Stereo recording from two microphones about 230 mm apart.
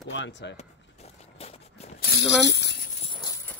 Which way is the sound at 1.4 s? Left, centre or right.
Left.